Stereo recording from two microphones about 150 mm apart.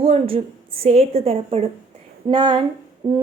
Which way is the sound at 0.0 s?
40° right (ahead or behind).